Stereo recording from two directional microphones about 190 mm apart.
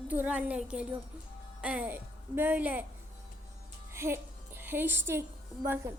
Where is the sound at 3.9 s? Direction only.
15° right (ahead or behind).